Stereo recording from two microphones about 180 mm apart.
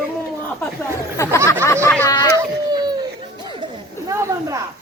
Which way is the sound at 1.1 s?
15° left (ahead or behind).